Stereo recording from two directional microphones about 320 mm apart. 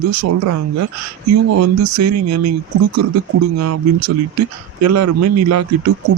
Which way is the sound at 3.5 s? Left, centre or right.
Right.